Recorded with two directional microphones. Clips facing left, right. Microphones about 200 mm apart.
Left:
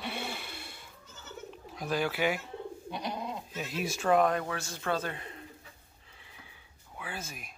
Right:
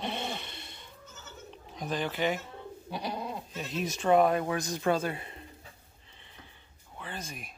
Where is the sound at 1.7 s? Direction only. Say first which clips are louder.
Left 1 dB; 10° left (ahead or behind).